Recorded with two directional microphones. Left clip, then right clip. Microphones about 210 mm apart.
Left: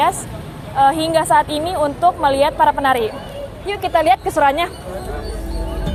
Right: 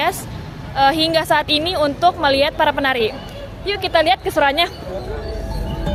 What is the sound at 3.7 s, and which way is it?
Speech, 20° right (ahead or behind).